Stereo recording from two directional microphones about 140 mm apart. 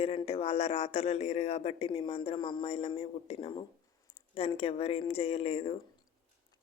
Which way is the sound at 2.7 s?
45° left (ahead or behind).